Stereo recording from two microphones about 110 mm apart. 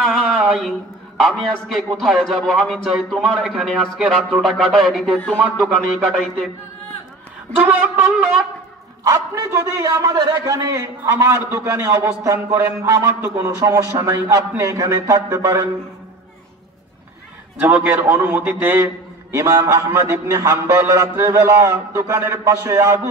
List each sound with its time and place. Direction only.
0.0 s a sound: centre (ahead or behind)
1.2 s a man's voice: centre (ahead or behind)
7.6 s wind instrument: 15° right (ahead or behind)
9.0 s a man's voice: 30° right (ahead or behind)
17.6 s a man's voice: 15° right (ahead or behind)